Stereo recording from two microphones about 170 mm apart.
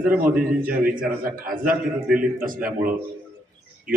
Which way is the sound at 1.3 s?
55° right (ahead or behind).